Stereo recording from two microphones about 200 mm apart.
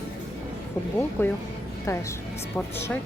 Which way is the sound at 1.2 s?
10° left (ahead or behind).